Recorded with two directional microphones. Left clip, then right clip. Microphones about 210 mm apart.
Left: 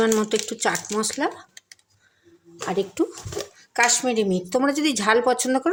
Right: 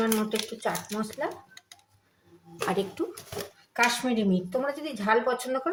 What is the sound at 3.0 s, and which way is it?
Speech, 45° left (ahead or behind).